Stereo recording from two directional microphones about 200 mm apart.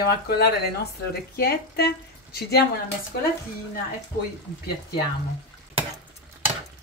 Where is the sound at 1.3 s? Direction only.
50° left (ahead or behind).